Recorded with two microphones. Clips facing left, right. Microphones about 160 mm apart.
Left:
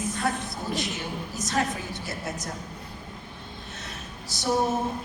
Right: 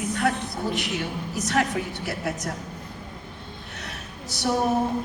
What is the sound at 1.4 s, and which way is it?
Speech, 65° right (ahead or behind).